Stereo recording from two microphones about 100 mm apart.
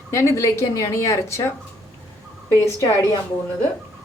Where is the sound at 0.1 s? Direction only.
30° left (ahead or behind).